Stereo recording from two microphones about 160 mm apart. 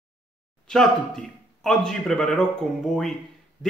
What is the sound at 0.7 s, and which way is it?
Speech, 5° left (ahead or behind).